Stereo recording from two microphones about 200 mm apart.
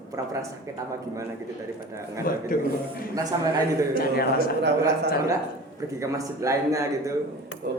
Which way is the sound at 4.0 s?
50° left (ahead or behind).